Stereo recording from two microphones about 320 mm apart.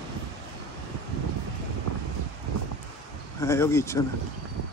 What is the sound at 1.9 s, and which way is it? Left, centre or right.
Wind, right.